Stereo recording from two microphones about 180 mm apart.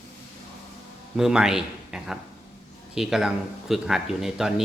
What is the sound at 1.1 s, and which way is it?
Speech, 5° right (ahead or behind).